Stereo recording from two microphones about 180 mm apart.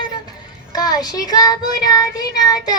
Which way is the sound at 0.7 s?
20° left (ahead or behind).